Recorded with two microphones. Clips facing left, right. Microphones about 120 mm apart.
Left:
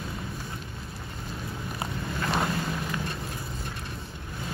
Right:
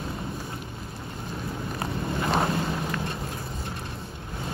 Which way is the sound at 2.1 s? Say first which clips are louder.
Right 3 dB; 25° right (ahead or behind).